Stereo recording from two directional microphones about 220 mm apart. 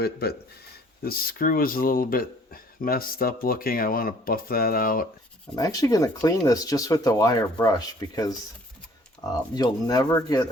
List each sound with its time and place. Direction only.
0.0 s speech: 45° left (ahead or behind)
5.5 s speech: 15° left (ahead or behind)